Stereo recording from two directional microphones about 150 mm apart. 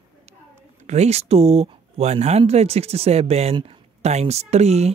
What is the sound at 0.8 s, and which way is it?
Speech, 45° right (ahead or behind).